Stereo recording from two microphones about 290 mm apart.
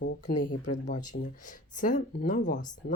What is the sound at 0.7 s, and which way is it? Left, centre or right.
Speech, left.